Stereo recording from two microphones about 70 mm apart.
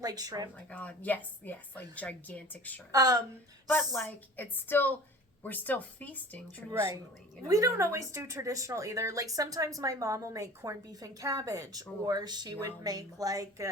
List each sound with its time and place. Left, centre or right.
0.0 s speech: right
0.7 s speech: left
2.9 s speech: right
4.0 s speech: left
6.7 s a woman's voice: right
7.4 s speech: right